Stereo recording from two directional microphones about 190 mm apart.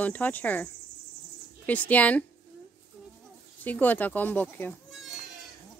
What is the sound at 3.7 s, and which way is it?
Speech, 10° left (ahead or behind).